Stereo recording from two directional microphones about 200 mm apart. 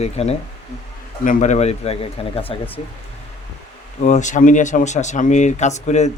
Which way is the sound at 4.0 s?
35° left (ahead or behind).